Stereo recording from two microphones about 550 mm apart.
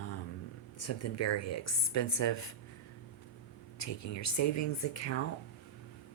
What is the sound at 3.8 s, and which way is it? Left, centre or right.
Speech, left.